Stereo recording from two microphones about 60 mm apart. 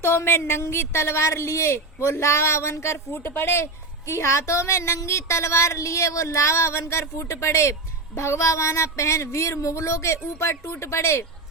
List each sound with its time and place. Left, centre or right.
0.0 s a woman's voice: left